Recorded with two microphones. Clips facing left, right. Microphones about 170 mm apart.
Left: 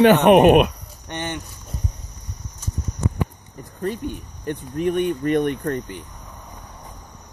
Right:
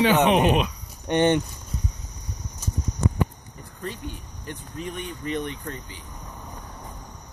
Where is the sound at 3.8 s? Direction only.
50° left (ahead or behind).